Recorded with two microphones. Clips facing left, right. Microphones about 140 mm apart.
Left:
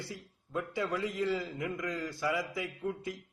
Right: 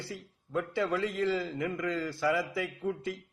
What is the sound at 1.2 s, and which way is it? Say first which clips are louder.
A man's voice: right 3 dB; 10° left (ahead or behind).